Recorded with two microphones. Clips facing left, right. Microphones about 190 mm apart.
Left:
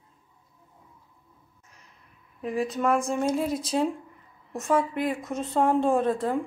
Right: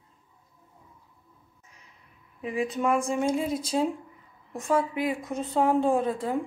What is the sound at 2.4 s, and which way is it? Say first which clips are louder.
Speech: left 1 dB; 5° right (ahead or behind).